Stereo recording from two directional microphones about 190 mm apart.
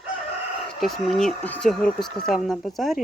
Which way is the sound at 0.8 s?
Centre (ahead or behind).